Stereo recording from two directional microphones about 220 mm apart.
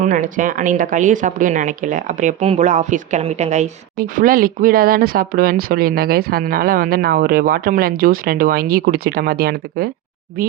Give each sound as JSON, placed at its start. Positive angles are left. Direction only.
{"t": 0.0, "sound": "speech", "side_deg": -35}